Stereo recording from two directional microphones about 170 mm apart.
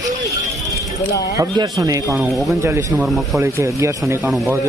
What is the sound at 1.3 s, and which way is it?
Speech, 20° right (ahead or behind).